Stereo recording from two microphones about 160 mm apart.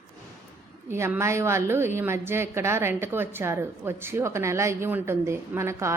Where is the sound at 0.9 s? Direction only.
15° right (ahead or behind).